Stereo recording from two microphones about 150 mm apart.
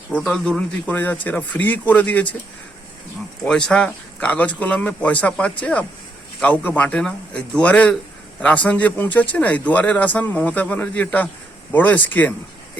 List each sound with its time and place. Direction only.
0.1 s speech: 5° left (ahead or behind)
3.4 s speech: 5° left (ahead or behind)